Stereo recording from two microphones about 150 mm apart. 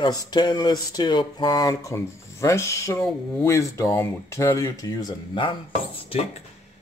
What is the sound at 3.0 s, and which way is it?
Speech, 5° left (ahead or behind).